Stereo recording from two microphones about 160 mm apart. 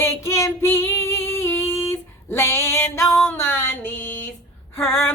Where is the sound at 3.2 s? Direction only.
15° left (ahead or behind).